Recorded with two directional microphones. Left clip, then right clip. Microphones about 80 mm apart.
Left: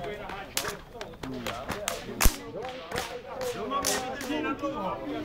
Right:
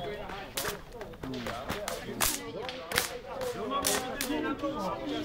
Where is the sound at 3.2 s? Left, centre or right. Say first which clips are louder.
Left 2 dB; centre.